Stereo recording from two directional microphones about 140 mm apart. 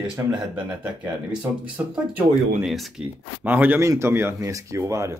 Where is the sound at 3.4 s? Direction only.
15° right (ahead or behind).